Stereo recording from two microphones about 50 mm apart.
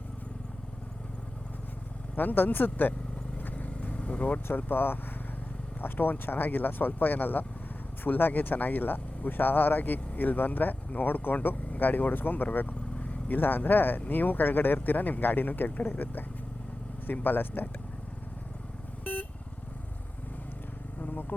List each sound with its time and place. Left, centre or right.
2.1 s speech: left
3.3 s vehicle: left
4.4 s speech: left
21.0 s vehicle: left